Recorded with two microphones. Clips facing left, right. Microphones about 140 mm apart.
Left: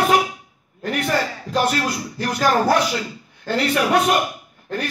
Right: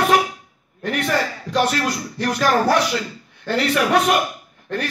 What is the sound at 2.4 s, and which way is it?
A man's voice, 10° left (ahead or behind).